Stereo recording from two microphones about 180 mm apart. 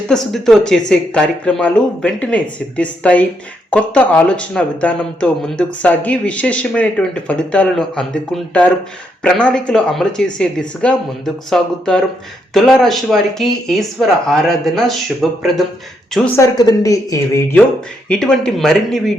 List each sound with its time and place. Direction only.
0.1 s speech: centre (ahead or behind)
16.4 s speech: 20° left (ahead or behind)
18.1 s speech: 5° left (ahead or behind)